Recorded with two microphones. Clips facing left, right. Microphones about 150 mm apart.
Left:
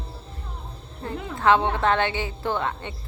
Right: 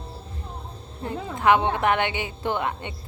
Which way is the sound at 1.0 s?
20° right (ahead or behind).